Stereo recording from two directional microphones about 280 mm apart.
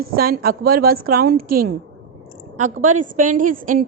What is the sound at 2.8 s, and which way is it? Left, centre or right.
Speech, right.